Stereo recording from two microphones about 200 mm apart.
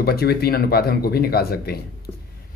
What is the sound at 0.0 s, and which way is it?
A man's voice, 50° left (ahead or behind).